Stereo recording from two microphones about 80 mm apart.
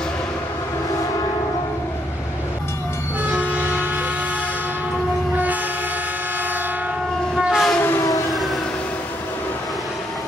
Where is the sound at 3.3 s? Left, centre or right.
Centre.